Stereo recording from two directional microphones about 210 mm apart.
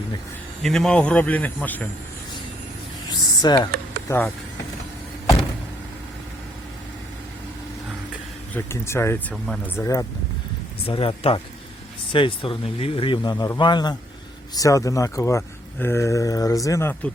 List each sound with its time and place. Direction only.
0.6 s speech: centre (ahead or behind)
3.1 s a sound: 20° left (ahead or behind)
4.1 s speech: 15° left (ahead or behind)
8.5 s speech: 10° left (ahead or behind)
10.8 s speech: 25° left (ahead or behind); by 17.1 s 10° left (ahead or behind)